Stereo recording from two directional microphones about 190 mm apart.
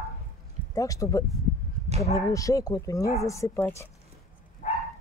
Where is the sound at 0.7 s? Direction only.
15° left (ahead or behind).